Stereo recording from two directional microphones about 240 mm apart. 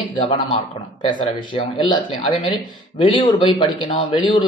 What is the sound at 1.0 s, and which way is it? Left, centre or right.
Speech, left.